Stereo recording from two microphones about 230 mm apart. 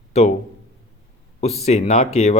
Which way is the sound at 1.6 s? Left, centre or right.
Left.